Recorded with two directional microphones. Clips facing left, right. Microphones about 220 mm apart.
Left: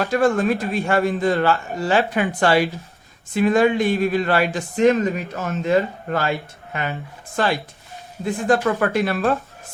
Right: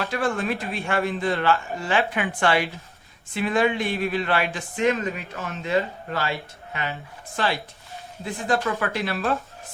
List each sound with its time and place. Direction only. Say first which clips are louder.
0.0 s a man's voice: left 7 dB; 45° left (ahead or behind)
7.3 s speech: left 5 dB; 45° left (ahead or behind)